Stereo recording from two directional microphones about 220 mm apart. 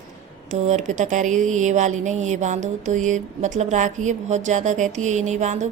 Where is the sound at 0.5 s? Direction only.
30° right (ahead or behind).